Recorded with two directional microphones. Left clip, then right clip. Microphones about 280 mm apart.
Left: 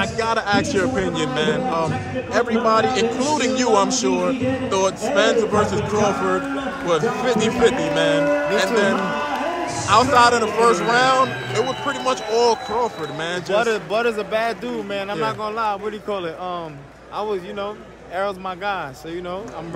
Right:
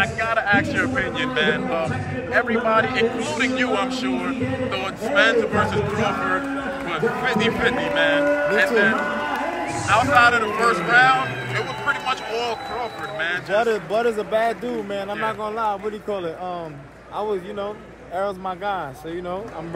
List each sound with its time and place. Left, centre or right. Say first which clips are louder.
0.0 s a man's voice: even; left
6.9 s a man's voice: left 3 dB; centre
13.5 s speech: left 2 dB; centre
17.2 s speech: left 1 dB; centre